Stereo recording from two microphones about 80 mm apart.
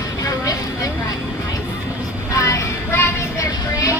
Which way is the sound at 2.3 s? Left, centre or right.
Left.